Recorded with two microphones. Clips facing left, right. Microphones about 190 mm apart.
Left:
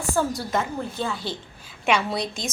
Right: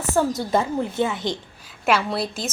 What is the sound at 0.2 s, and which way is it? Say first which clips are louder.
A woman's voice: right 5 dB; 25° right (ahead or behind).